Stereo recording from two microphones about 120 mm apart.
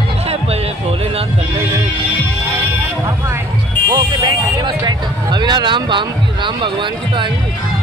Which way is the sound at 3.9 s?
35° right (ahead or behind).